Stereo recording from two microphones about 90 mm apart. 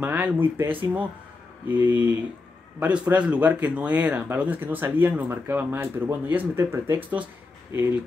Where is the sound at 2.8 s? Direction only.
15° right (ahead or behind).